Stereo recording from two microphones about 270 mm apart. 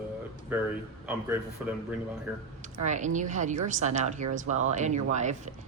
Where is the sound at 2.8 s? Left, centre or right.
Right.